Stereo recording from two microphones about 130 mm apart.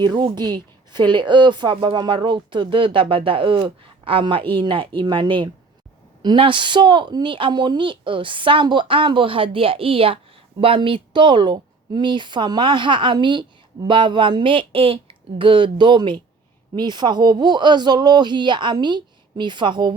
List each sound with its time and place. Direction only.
0.0 s a woman's voice: 35° right (ahead or behind)